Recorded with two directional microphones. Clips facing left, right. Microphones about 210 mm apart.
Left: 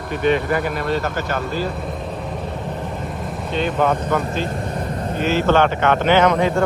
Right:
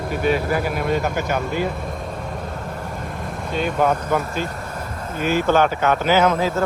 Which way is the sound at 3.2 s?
Centre (ahead or behind).